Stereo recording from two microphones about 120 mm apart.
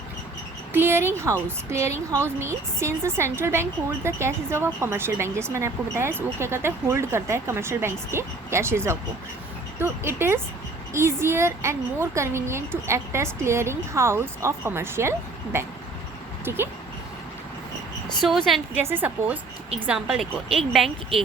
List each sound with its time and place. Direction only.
0.7 s a woman's voice: 20° right (ahead or behind)
16.4 s speech: 20° right (ahead or behind)
18.2 s speech: centre (ahead or behind)
18.7 s a woman's voice: 20° right (ahead or behind); by 21.2 s centre (ahead or behind)